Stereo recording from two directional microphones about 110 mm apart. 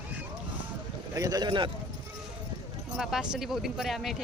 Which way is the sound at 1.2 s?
35° right (ahead or behind).